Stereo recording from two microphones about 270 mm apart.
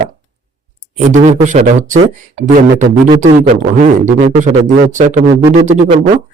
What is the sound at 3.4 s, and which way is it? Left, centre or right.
Speech, right.